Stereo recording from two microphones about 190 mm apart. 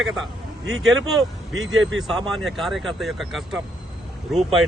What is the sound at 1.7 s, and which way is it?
Speech, 90° right.